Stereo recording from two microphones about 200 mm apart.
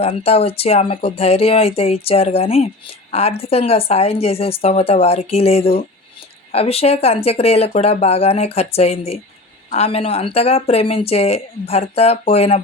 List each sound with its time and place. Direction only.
0.0 s a woman's voice: 30° left (ahead or behind)